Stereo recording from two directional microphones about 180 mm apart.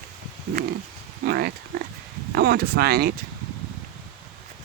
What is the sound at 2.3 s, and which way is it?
Speech, 60° right (ahead or behind).